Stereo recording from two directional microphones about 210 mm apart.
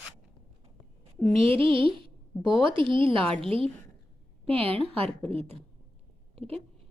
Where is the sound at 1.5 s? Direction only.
25° right (ahead or behind).